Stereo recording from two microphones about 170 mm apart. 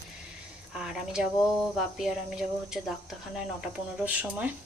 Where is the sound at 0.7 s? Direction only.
5° right (ahead or behind).